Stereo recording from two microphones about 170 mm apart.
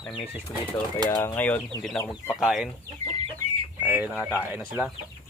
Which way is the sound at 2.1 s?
Centre (ahead or behind).